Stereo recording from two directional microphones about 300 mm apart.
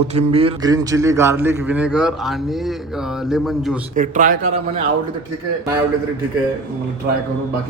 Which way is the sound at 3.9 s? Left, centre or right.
Right.